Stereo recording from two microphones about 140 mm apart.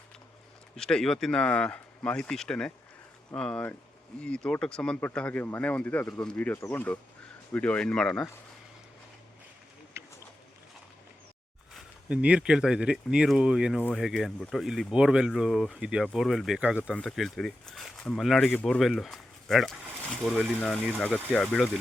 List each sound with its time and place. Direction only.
0.8 s speech: 5° left (ahead or behind)
10.0 s a sound: 20° right (ahead or behind)
12.0 s speech: 10° right (ahead or behind)
21.0 s speech: 5° left (ahead or behind)